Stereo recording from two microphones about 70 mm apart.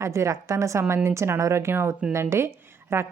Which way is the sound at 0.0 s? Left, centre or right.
Right.